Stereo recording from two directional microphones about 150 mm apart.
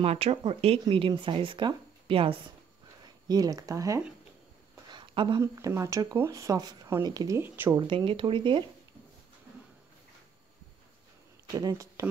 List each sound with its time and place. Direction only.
0.0 s speech: 40° right (ahead or behind)
3.3 s speech: 25° right (ahead or behind)
4.9 s a sound: 35° right (ahead or behind)
5.4 s speech: 20° right (ahead or behind)
7.8 s speech: 35° right (ahead or behind)
11.5 s speech: 20° right (ahead or behind)